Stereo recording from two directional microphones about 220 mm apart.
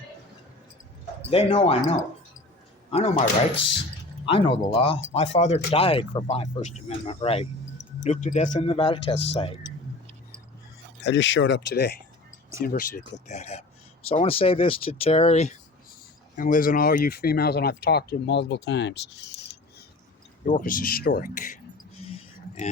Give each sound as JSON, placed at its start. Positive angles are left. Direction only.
{"t": 1.2, "sound": "speech", "side_deg": 25}
{"t": 4.3, "sound": "speech", "side_deg": 25}
{"t": 11.0, "sound": "speech", "side_deg": 55}
{"t": 20.4, "sound": "speech", "side_deg": 40}
{"t": 22.0, "sound": "a sound", "side_deg": 25}